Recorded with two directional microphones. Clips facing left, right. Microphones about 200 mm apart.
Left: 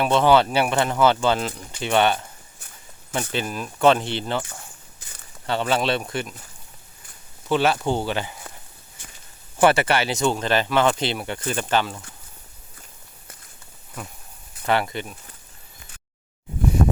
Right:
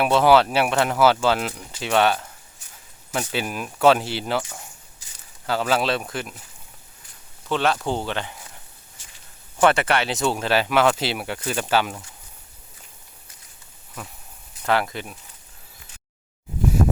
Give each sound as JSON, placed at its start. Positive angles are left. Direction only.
{"t": 0.0, "sound": "speech", "side_deg": -5}
{"t": 3.3, "sound": "speech", "side_deg": -10}
{"t": 4.9, "sound": "a sound", "side_deg": 55}
{"t": 5.5, "sound": "speech", "side_deg": 0}
{"t": 7.4, "sound": "speech", "side_deg": 5}
{"t": 9.0, "sound": "walk", "side_deg": 55}
{"t": 9.6, "sound": "speech", "side_deg": 5}
{"t": 14.6, "sound": "speech", "side_deg": 0}